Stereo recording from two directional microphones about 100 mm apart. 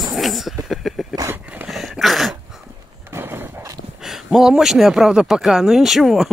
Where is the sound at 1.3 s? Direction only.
15° right (ahead or behind).